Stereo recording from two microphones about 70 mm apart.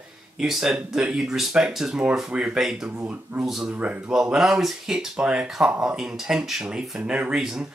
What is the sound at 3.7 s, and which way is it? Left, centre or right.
Speech, centre.